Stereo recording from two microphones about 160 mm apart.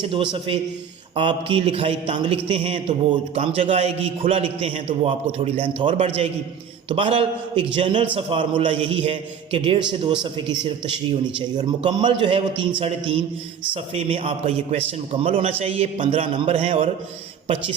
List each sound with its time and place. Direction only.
0.0 s a man's voice: 30° right (ahead or behind)